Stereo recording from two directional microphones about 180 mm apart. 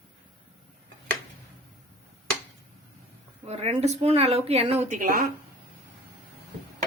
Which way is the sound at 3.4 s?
35° right (ahead or behind).